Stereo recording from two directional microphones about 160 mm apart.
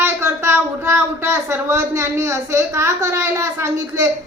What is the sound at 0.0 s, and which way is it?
A woman's voice, 15° right (ahead or behind).